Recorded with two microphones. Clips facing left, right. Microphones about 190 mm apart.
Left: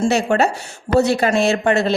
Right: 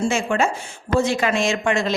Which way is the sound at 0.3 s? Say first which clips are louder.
Left 4 dB; 40° left (ahead or behind).